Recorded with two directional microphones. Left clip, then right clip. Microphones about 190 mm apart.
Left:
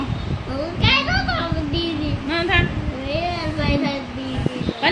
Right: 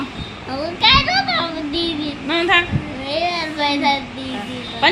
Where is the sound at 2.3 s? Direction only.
30° right (ahead or behind).